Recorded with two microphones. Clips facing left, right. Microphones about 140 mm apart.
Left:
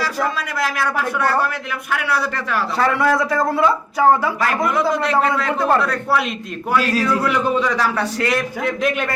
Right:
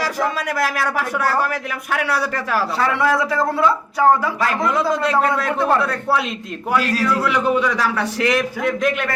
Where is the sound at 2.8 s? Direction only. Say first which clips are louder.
Left 3 dB; 5° right (ahead or behind).